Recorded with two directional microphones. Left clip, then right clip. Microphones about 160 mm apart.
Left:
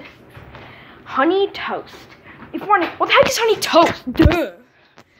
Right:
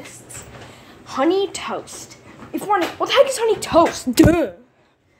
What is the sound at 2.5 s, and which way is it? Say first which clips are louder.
Speech: left 3 dB; 20° right (ahead or behind).